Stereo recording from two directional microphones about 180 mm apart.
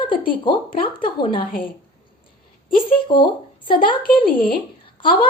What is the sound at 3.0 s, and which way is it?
Speech, 25° left (ahead or behind).